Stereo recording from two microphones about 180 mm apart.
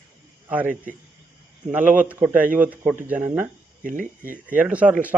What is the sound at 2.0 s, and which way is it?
Speech, 10° right (ahead or behind).